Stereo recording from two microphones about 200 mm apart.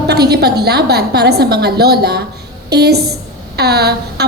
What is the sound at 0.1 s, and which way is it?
A woman's voice, 55° right (ahead or behind).